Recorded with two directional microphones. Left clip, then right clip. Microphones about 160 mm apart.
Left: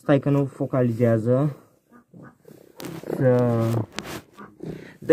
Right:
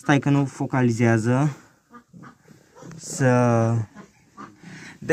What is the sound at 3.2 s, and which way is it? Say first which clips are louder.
Speech: right 1 dB; 15° left (ahead or behind).